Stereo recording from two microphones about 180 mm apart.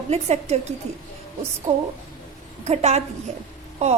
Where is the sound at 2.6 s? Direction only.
35° right (ahead or behind).